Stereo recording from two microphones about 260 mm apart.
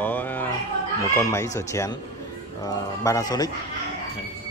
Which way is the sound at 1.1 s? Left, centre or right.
Centre.